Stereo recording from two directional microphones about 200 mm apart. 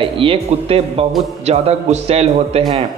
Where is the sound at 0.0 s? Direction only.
25° right (ahead or behind).